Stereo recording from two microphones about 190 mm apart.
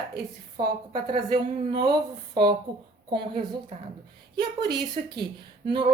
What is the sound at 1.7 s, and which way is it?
A woman's voice, 25° right (ahead or behind).